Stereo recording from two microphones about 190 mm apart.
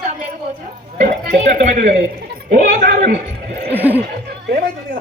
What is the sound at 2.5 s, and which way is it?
Speech, 55° right (ahead or behind).